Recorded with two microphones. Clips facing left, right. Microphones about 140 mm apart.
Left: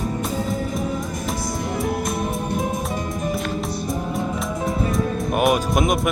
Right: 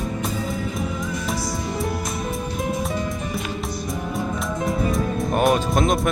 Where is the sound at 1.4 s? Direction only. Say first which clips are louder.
Left 1 dB; 55° left (ahead or behind).